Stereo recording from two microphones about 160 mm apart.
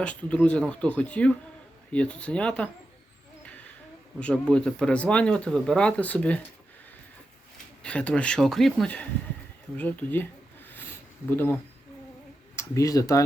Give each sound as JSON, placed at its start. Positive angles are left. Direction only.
{"t": 0.0, "sound": "speech", "side_deg": 5}
{"t": 4.2, "sound": "speech", "side_deg": 5}
{"t": 7.8, "sound": "speech", "side_deg": 5}
{"t": 11.3, "sound": "speech", "side_deg": 15}
{"t": 12.5, "sound": "speech", "side_deg": 20}